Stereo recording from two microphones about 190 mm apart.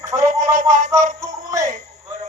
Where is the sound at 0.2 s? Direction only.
45° right (ahead or behind).